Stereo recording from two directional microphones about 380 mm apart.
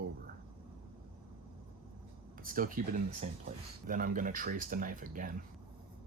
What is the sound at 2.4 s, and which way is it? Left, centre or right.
Speech, right.